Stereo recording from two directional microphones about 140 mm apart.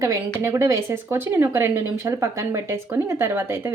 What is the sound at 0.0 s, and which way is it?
Speech, 20° right (ahead or behind).